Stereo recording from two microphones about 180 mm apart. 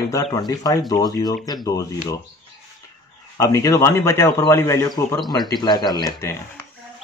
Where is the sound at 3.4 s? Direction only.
20° left (ahead or behind).